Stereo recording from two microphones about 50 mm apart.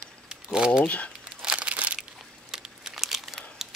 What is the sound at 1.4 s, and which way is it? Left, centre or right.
Crumpling, centre.